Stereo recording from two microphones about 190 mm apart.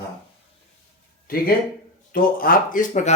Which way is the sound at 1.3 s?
50° left (ahead or behind).